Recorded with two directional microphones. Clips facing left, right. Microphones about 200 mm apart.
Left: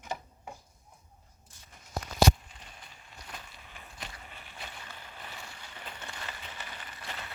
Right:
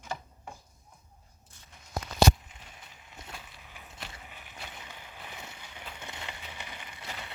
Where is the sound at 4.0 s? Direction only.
10° right (ahead or behind).